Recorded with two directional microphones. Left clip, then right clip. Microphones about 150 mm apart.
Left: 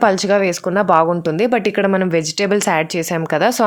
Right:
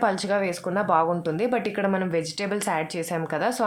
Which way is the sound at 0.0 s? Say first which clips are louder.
Left 9 dB; 50° left (ahead or behind).